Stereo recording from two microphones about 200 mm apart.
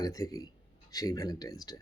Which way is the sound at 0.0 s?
15° left (ahead or behind).